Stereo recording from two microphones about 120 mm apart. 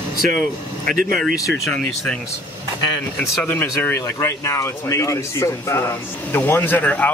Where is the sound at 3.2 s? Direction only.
15° left (ahead or behind).